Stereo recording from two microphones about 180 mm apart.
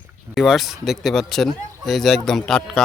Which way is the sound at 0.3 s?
Centre (ahead or behind).